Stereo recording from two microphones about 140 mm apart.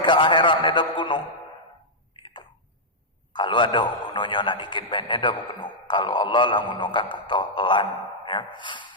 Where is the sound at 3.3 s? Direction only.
35° left (ahead or behind).